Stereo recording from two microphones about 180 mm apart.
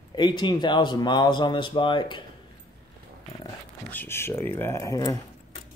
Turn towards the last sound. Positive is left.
turn(degrees=20)  # may be behind; listen again after turning